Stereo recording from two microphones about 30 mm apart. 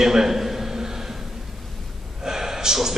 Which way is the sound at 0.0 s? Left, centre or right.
Centre.